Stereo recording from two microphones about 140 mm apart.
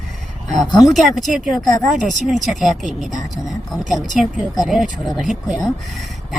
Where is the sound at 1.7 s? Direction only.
65° right (ahead or behind).